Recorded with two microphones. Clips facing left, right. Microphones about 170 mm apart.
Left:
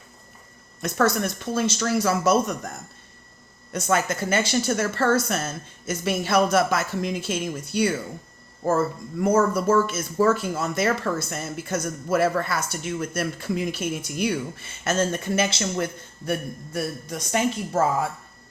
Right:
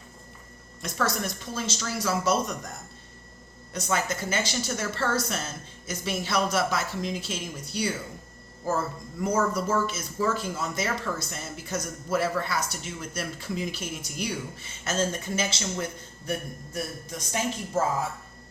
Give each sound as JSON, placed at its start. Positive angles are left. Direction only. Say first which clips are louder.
{"t": 0.8, "sound": "speech", "louder": "left 7 dB", "side_deg": 55}
{"t": 3.7, "sound": "speech", "louder": "left 5 dB", "side_deg": 55}
{"t": 9.2, "sound": "a woman's voice", "louder": "left 6 dB", "side_deg": 55}